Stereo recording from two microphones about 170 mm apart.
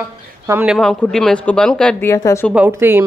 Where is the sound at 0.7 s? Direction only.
Centre (ahead or behind).